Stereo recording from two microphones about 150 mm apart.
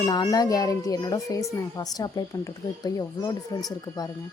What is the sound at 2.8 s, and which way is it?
Speech, 25° left (ahead or behind).